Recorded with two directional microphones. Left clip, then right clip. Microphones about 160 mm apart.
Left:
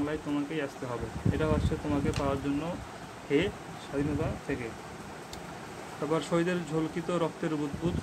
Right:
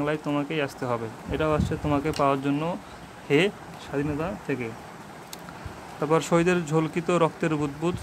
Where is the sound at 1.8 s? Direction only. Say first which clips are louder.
Right 7 dB; 65° right (ahead or behind).